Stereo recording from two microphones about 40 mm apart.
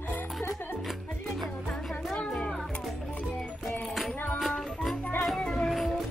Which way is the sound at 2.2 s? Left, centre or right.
Left.